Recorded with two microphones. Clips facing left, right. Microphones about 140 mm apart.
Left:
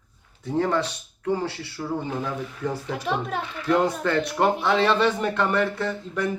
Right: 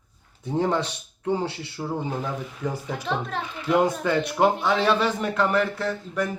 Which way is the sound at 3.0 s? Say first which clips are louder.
Left 1 dB; 5° left (ahead or behind).